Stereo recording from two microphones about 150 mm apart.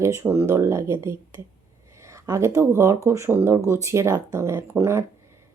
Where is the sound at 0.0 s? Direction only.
20° right (ahead or behind).